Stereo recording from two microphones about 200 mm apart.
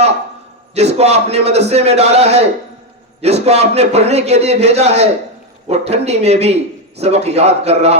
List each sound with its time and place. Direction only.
0.7 s a man's voice: 30° right (ahead or behind)